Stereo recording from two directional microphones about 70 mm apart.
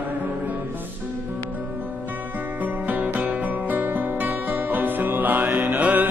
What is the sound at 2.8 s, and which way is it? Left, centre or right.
Music, right.